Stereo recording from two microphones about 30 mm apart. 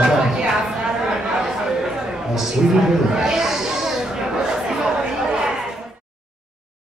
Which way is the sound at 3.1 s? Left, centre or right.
Centre.